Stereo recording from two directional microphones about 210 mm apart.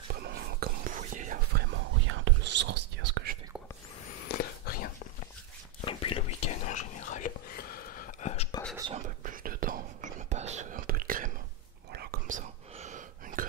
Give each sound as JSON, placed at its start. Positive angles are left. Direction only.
{"t": 0.1, "sound": "whispering", "side_deg": -50}
{"t": 2.0, "sound": "whispering", "side_deg": -60}
{"t": 4.3, "sound": "whispering", "side_deg": 45}
{"t": 5.8, "sound": "whispering", "side_deg": 25}
{"t": 8.9, "sound": "whispering", "side_deg": -40}